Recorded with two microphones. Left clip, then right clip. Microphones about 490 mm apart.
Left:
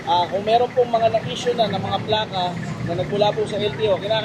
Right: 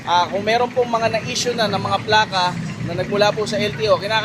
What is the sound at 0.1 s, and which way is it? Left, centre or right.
Vehicle, right.